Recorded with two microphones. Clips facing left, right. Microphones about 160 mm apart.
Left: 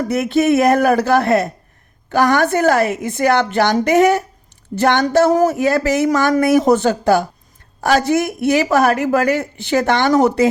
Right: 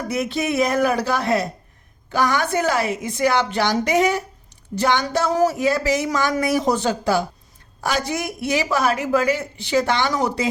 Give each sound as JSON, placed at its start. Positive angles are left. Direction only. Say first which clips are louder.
{"t": 0.1, "sound": "speech", "louder": "left 8 dB", "side_deg": 55}